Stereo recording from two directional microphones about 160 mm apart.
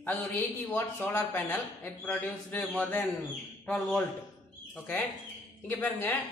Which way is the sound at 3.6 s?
5° left (ahead or behind).